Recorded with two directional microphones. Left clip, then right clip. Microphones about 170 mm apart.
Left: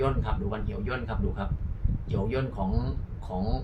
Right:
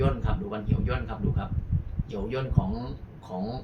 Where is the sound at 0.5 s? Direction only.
30° left (ahead or behind).